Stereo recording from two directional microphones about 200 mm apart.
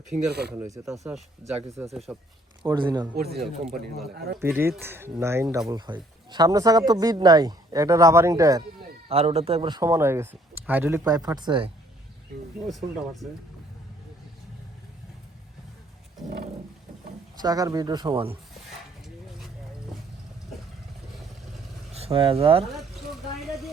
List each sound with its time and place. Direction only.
0.5 s speech: 15° right (ahead or behind)
1.9 s speech: centre (ahead or behind)
2.6 s speech: 20° right (ahead or behind)
3.2 s speech: 55° right (ahead or behind)
3.7 s speech: centre (ahead or behind)
4.4 s speech: 10° right (ahead or behind)
9.0 s speech: 30° right (ahead or behind)
12.6 s speech: centre (ahead or behind)
17.4 s speech: 20° right (ahead or behind)
21.9 s speech: 30° right (ahead or behind)
22.7 s a sound: centre (ahead or behind)